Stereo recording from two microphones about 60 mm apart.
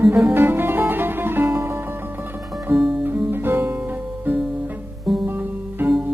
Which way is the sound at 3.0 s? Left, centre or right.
Right.